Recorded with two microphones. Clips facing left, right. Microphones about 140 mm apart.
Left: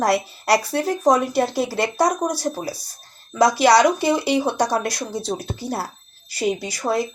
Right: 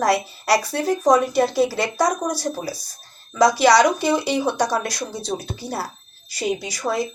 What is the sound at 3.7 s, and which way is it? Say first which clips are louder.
Speech: left 2 dB; 25° left (ahead or behind).